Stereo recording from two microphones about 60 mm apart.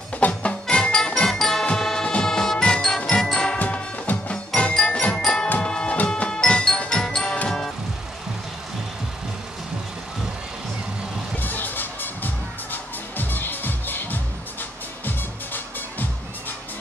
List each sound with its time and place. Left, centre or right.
0.3 s music: centre
3.5 s music: left
11.3 s music: left
15.0 s music: left